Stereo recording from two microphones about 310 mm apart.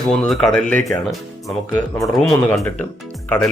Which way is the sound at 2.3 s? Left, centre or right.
Centre.